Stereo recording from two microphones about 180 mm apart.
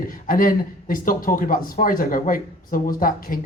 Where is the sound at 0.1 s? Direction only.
50° left (ahead or behind).